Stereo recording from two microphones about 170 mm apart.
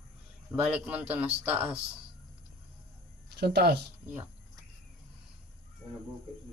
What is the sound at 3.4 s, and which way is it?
Speech, 70° right (ahead or behind).